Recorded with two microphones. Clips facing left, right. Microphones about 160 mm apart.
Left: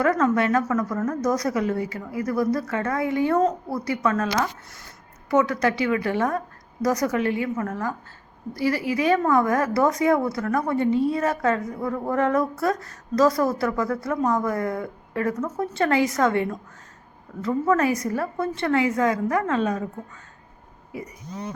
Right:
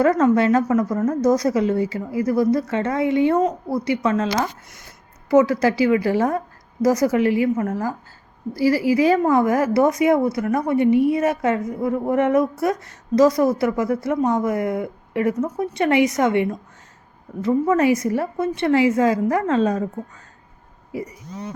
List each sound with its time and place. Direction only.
0.0 s a woman's voice: 25° right (ahead or behind)